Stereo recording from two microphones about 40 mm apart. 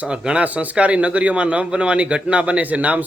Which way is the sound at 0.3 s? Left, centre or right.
Right.